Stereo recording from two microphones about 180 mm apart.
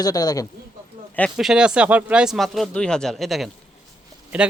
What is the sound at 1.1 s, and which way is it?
A man's voice, centre (ahead or behind).